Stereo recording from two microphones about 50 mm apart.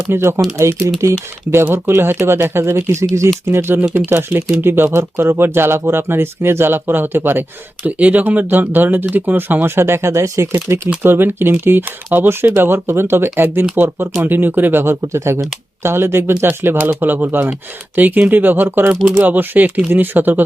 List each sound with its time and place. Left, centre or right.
0.1 s speech: right
0.5 s speech: right
1.7 s speech: right
3.5 s speech: right
7.9 s speech: right
9.7 s speech: right
11.0 s speech: right
15.0 s speech: right
15.8 s speech: right
16.5 s speech: right
19.1 s speech: right